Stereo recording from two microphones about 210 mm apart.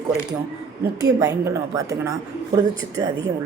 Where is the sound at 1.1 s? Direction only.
15° right (ahead or behind).